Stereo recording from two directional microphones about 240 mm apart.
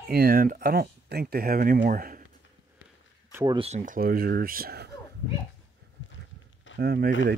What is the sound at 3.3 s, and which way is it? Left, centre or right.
Speech, centre.